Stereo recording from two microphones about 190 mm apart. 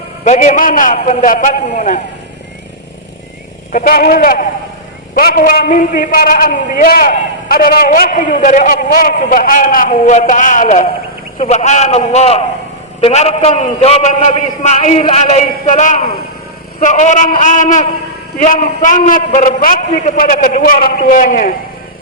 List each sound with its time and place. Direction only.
0.3 s a man's voice: 40° left (ahead or behind)
3.7 s a man's voice: 45° left (ahead or behind)